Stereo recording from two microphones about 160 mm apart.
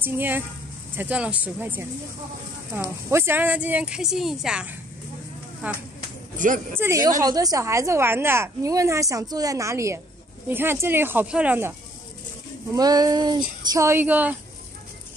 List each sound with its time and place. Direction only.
0.0 s speech: 10° right (ahead or behind)
3.1 s speech: 15° right (ahead or behind)
6.3 s speech: 55° right (ahead or behind)
6.8 s a woman's voice: 20° right (ahead or behind)
12.7 s a woman's voice: 25° right (ahead or behind)